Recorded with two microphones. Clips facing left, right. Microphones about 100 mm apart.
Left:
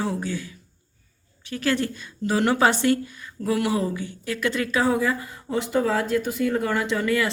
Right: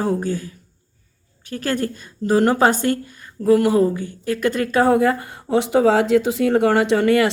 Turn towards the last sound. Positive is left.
turn(degrees=-65)  # may be behind; listen again after turning